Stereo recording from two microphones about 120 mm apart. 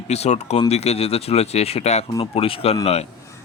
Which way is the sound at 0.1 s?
65° left (ahead or behind).